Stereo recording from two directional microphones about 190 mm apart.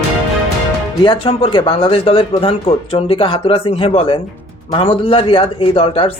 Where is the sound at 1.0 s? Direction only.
30° left (ahead or behind).